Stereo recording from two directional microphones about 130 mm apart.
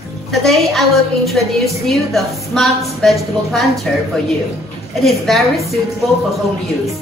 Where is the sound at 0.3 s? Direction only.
5° left (ahead or behind).